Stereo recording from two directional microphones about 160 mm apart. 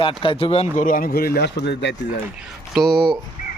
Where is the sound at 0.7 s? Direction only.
55° left (ahead or behind); by 1.9 s 90° left.